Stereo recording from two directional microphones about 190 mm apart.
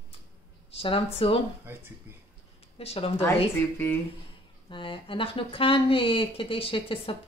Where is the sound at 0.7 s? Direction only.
30° left (ahead or behind).